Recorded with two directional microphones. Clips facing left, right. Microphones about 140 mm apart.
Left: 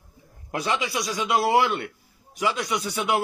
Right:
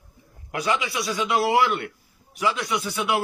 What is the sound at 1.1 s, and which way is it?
Speech, 25° left (ahead or behind).